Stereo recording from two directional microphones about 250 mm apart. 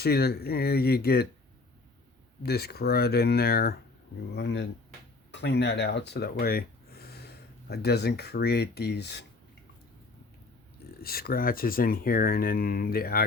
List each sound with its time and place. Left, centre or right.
0.0 s speech: left
2.4 s speech: left
11.0 s speech: left